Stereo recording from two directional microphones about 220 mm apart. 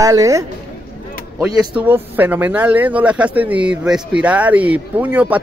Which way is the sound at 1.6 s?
10° right (ahead or behind).